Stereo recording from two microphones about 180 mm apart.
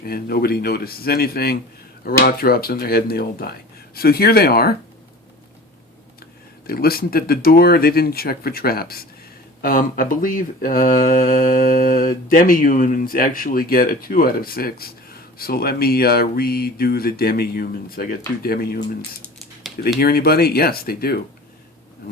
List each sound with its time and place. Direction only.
0.0 s speech: 55° left (ahead or behind)
6.7 s speech: 55° left (ahead or behind)
20.0 s speech: 60° left (ahead or behind)